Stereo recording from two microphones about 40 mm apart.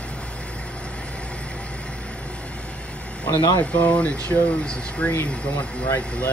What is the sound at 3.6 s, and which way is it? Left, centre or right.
Speech, left.